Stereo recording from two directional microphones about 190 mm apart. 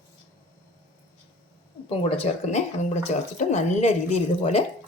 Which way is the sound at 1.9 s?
30° left (ahead or behind).